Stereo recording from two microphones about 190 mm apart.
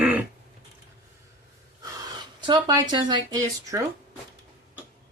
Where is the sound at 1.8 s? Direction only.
20° right (ahead or behind).